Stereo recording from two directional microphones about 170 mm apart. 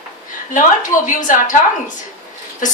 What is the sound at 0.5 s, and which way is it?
A woman's voice, 50° left (ahead or behind).